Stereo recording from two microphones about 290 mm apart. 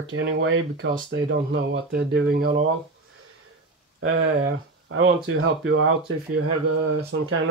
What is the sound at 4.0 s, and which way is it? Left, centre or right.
Speech, right.